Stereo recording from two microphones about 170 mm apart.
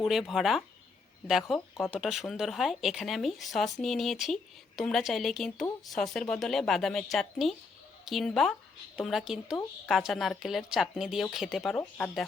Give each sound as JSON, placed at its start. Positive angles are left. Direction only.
{"t": 0.0, "sound": "speech", "side_deg": 0}
{"t": 11.8, "sound": "speech", "side_deg": 10}